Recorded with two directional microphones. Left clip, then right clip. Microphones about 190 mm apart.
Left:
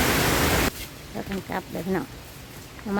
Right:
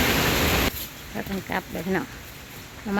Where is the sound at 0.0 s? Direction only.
25° left (ahead or behind).